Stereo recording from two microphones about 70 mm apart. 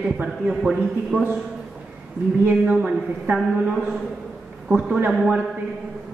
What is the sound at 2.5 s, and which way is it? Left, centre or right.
Speech, right.